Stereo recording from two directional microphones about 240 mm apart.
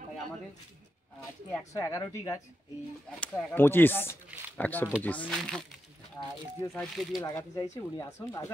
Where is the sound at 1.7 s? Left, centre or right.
Centre.